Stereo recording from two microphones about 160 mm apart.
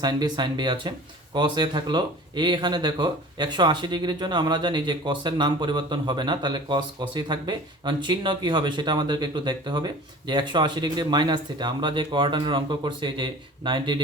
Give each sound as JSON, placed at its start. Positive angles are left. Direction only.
{"t": 0.0, "sound": "speech", "side_deg": -25}